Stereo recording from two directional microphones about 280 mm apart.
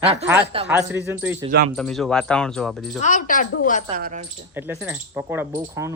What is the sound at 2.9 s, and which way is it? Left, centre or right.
Speech, left.